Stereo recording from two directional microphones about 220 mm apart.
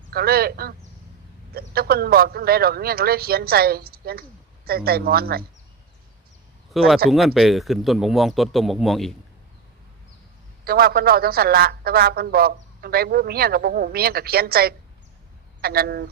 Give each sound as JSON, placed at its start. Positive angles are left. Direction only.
{"t": 0.1, "sound": "a man's voice", "side_deg": -45}
{"t": 6.8, "sound": "speech", "side_deg": 0}
{"t": 10.7, "sound": "a man's voice", "side_deg": -45}